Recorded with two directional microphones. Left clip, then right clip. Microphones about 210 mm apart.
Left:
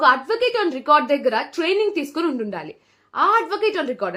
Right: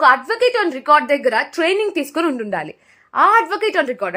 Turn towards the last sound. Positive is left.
turn(degrees=-35)  # may be behind; listen again after turning